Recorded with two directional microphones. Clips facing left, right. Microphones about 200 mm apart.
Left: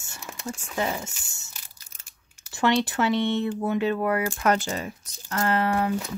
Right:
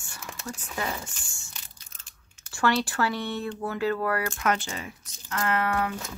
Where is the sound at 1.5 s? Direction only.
10° left (ahead or behind).